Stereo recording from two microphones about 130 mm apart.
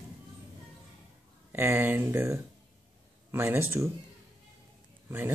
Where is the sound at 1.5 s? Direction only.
15° right (ahead or behind).